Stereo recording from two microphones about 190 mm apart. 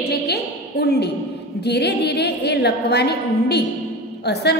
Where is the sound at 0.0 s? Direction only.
60° left (ahead or behind).